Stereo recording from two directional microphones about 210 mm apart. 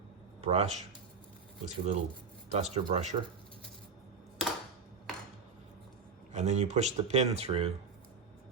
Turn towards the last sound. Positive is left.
turn(degrees=-30)  # may be behind; listen again after turning